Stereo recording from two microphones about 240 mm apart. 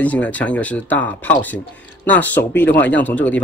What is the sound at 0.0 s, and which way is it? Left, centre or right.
Speech, centre.